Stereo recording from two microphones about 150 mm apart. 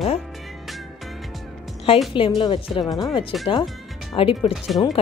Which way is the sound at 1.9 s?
40° left (ahead or behind).